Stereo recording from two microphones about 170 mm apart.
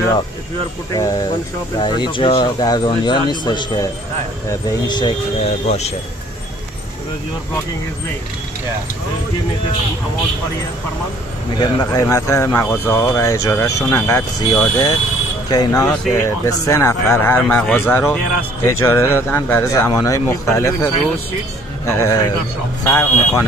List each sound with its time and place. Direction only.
0.9 s speech: 20° left (ahead or behind)
5.7 s speech: 40° left (ahead or behind)
11.5 s speech: 25° left (ahead or behind)